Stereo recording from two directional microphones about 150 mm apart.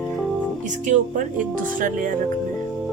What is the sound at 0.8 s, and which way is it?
Speech, 60° right (ahead or behind).